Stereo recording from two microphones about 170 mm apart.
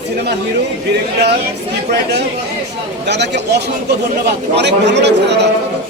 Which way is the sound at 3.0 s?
90° right.